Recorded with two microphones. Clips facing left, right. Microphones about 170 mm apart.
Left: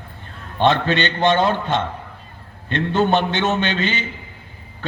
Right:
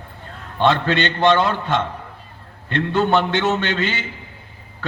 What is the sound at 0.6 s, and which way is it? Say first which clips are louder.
A man's voice: even; 20° left (ahead or behind).